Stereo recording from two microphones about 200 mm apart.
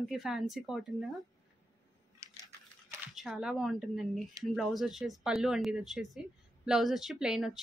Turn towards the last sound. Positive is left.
turn(degrees=-5)  # may be behind; listen again after turning